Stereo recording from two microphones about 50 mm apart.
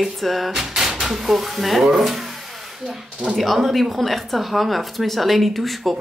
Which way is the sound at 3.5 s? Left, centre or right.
Centre.